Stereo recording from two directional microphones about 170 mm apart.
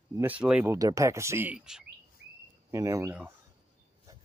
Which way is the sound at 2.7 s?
15° right (ahead or behind).